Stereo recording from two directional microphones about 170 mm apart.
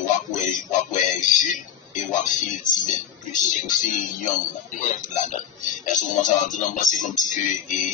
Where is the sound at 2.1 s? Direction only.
45° left (ahead or behind).